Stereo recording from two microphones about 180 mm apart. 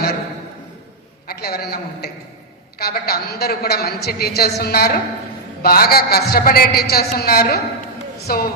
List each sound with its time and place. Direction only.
1.3 s a man's voice: 60° left (ahead or behind)